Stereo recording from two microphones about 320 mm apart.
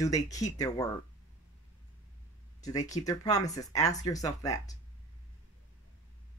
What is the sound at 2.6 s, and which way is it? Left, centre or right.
Speech, centre.